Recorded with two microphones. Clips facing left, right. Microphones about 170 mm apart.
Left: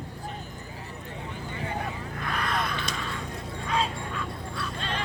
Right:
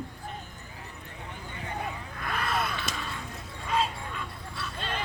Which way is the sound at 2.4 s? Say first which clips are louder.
Even; 5° right (ahead or behind).